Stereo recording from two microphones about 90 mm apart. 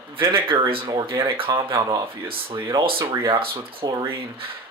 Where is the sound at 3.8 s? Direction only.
50° right (ahead or behind).